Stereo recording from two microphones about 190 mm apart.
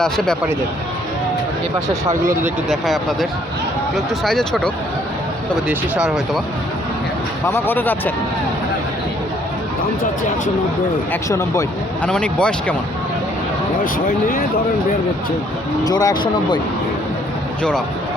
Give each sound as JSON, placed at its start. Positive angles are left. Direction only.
{"t": 1.9, "sound": "speech", "side_deg": -15}
{"t": 2.6, "sound": "speech", "side_deg": 0}
{"t": 7.4, "sound": "speech", "side_deg": 10}
{"t": 11.1, "sound": "speech", "side_deg": 15}
{"t": 12.0, "sound": "speech", "side_deg": 5}
{"t": 13.8, "sound": "speech", "side_deg": 45}
{"t": 15.8, "sound": "speech", "side_deg": 20}
{"t": 17.6, "sound": "speech", "side_deg": 5}